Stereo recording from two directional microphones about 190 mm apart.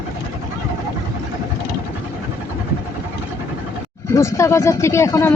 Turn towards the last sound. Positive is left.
turn(degrees=15)  # may be behind; listen again after turning